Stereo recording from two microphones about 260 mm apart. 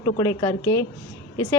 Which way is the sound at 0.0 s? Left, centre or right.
Centre.